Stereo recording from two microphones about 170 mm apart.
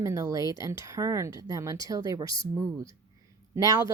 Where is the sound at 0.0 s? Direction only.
20° right (ahead or behind).